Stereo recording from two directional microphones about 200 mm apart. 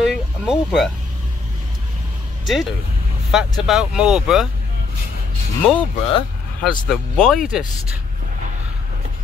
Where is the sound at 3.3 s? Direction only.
Centre (ahead or behind).